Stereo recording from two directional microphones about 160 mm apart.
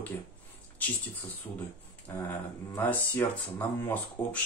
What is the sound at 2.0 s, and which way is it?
Speech, 10° left (ahead or behind).